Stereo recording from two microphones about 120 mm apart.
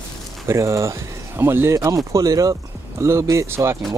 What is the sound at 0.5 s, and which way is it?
Speech, 25° right (ahead or behind).